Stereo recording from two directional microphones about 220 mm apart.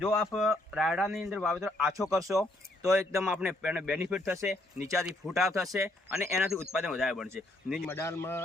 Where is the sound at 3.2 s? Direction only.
Centre (ahead or behind).